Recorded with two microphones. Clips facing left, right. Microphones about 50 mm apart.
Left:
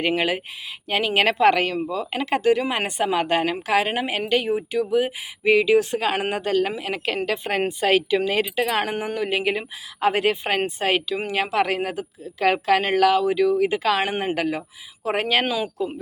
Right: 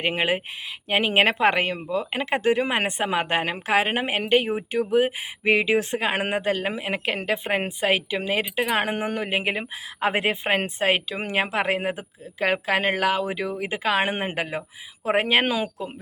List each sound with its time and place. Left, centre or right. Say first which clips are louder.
0.0 s speech: left 1 dB; right